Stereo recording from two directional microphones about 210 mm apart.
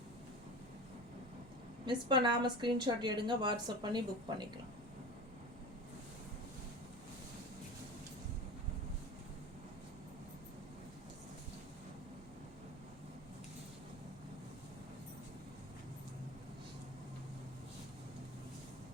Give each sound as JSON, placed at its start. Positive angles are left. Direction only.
{"t": 1.9, "sound": "a woman's voice", "side_deg": -20}